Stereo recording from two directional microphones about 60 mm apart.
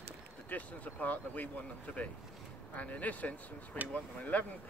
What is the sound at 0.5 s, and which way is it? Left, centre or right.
Speech, left.